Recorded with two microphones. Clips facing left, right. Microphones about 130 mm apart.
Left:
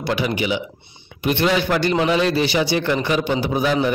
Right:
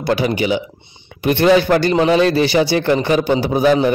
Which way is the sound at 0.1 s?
35° right (ahead or behind).